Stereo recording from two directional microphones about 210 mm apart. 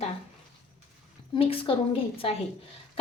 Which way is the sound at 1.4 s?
25° left (ahead or behind).